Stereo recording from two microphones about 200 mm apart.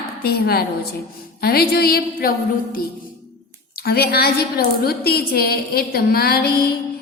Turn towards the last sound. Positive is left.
turn(degrees=50)  # may be behind; listen again after turning